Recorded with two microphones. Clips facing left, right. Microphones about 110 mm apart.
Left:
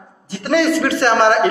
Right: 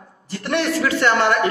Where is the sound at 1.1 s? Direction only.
30° left (ahead or behind).